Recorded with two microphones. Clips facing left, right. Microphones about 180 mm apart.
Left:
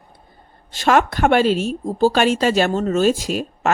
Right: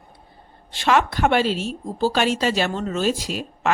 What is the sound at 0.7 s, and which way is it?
Speech, 45° left (ahead or behind).